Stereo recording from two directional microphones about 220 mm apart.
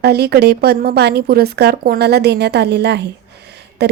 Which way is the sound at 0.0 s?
50° right (ahead or behind).